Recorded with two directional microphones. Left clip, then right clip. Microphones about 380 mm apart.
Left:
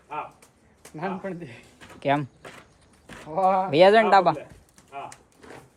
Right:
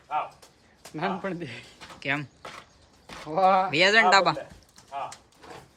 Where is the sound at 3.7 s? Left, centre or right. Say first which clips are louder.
Left 3 dB; centre.